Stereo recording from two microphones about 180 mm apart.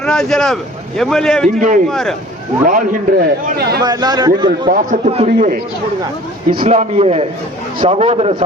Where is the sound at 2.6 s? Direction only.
50° right (ahead or behind).